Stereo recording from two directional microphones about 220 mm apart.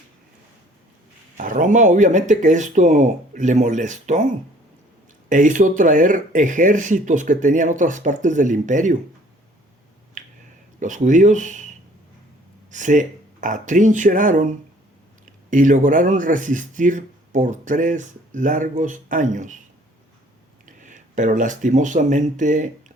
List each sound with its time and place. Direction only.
1.4 s speech: 35° right (ahead or behind)
10.2 s finger snapping: 35° right (ahead or behind)
10.8 s speech: 35° right (ahead or behind)
12.7 s speech: 35° right (ahead or behind)
20.7 s speech: 35° right (ahead or behind)